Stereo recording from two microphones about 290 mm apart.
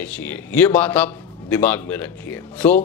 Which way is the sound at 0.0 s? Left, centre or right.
Centre.